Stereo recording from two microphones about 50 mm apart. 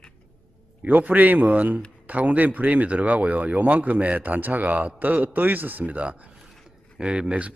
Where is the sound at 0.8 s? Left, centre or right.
Right.